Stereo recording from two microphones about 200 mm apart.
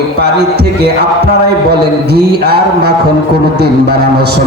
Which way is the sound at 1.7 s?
55° right (ahead or behind).